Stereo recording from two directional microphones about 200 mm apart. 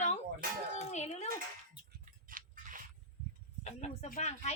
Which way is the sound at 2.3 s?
40° right (ahead or behind).